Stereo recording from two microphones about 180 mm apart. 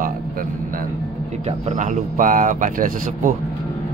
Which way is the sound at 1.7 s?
45° right (ahead or behind).